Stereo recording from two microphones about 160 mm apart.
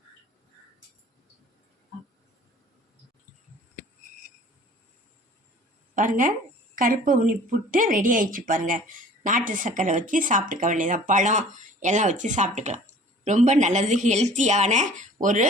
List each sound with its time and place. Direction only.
5.9 s a woman's voice: 55° right (ahead or behind)